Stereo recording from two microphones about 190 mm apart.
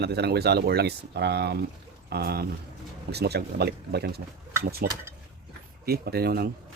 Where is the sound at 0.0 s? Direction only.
60° right (ahead or behind).